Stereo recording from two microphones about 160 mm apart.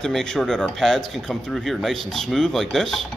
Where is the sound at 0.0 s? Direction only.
5° left (ahead or behind).